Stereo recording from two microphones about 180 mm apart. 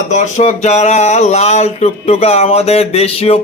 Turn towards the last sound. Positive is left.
turn(degrees=35)  # may be behind; listen again after turning